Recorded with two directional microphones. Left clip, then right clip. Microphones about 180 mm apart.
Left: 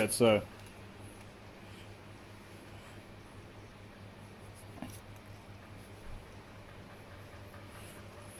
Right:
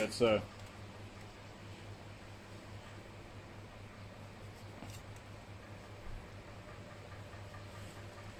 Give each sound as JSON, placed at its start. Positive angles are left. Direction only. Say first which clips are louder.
{"t": 0.0, "sound": "speech", "louder": "left 4 dB", "side_deg": 50}